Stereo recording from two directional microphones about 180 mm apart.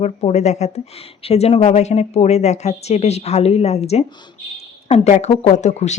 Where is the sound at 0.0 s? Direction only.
35° left (ahead or behind).